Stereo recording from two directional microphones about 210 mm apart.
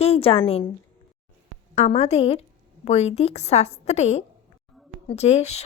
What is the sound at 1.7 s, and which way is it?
A woman's voice, 30° left (ahead or behind).